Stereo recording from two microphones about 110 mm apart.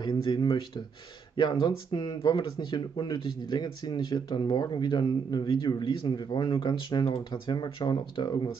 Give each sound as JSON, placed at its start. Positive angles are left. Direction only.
{"t": 0.0, "sound": "speech", "side_deg": 40}